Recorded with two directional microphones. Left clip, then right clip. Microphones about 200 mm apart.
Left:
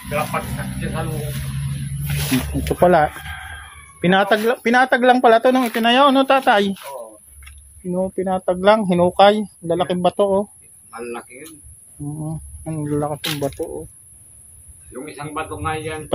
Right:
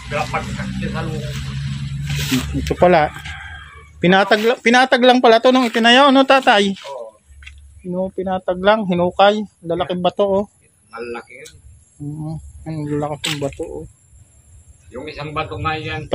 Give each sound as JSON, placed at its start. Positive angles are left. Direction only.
{"t": 2.1, "sound": "speech", "side_deg": 5}
{"t": 2.7, "sound": "speech", "side_deg": -10}
{"t": 7.3, "sound": "speech", "side_deg": 10}
{"t": 14.9, "sound": "a man's voice", "side_deg": -45}